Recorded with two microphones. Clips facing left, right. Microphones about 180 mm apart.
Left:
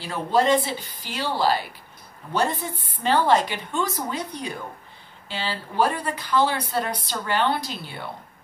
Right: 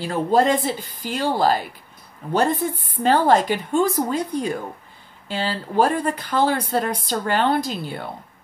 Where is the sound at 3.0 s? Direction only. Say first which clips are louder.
Right 3 dB; 45° right (ahead or behind).